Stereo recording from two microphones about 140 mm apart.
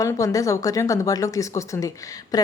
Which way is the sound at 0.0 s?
25° left (ahead or behind).